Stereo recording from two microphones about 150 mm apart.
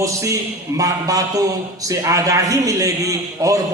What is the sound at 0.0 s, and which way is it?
A man's voice, 20° right (ahead or behind).